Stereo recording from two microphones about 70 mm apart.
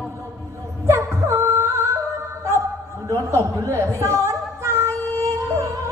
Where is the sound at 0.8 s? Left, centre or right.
Right.